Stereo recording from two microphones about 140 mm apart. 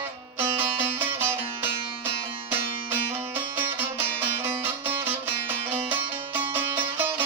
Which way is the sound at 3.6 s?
15° right (ahead or behind).